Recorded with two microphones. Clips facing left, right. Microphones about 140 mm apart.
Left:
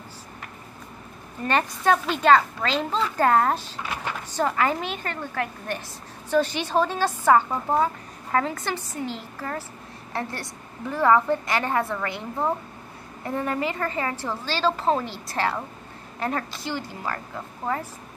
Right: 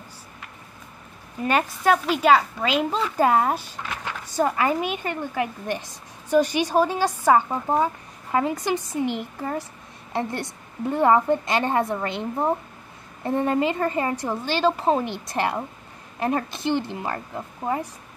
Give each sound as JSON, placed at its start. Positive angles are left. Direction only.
{"t": 1.4, "sound": "a woman's voice", "side_deg": -5}